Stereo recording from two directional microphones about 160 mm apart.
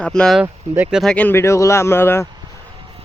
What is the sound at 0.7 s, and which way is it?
Speech, 15° right (ahead or behind).